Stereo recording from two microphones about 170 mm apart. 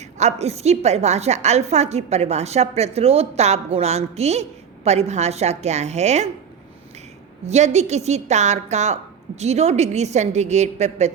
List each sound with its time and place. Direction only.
0.0 s a woman's voice: 40° right (ahead or behind)
7.4 s a woman's voice: 40° right (ahead or behind)